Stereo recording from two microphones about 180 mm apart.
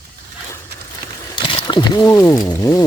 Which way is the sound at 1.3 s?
25° left (ahead or behind).